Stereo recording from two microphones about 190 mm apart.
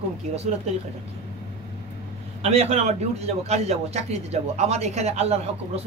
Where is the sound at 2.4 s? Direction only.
35° right (ahead or behind).